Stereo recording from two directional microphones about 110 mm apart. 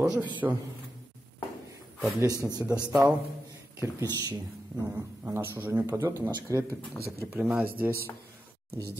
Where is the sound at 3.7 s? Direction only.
25° right (ahead or behind).